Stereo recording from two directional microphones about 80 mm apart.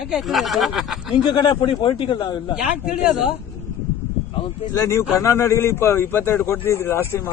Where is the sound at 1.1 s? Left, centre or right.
Left.